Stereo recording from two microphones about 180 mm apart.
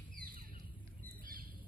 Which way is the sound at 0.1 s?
50° right (ahead or behind).